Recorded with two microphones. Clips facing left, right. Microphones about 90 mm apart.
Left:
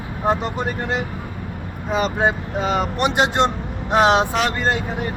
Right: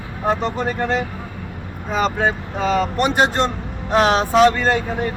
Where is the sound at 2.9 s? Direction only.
15° left (ahead or behind).